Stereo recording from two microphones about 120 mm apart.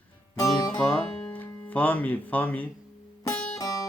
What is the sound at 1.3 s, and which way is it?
Speech, 15° left (ahead or behind).